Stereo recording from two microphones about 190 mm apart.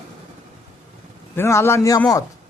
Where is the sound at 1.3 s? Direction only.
15° left (ahead or behind).